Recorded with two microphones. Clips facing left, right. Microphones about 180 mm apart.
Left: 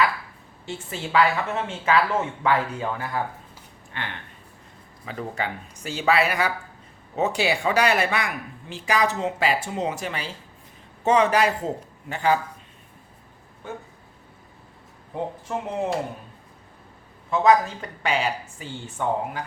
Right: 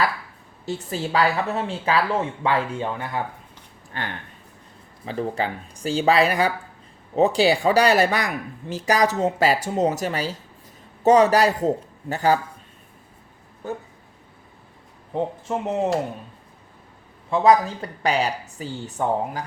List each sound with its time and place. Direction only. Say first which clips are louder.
0.6 s speech: right 5 dB; 35° right (ahead or behind)
3.9 s speech: right 3 dB; 40° right (ahead or behind)
15.1 s speech: right 4 dB; 25° right (ahead or behind)
17.3 s speech: right 2 dB; 35° right (ahead or behind)